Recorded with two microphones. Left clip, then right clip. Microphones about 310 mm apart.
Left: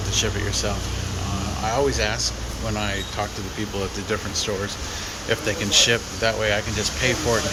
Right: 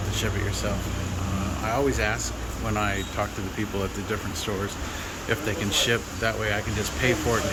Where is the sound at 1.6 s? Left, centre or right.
Centre.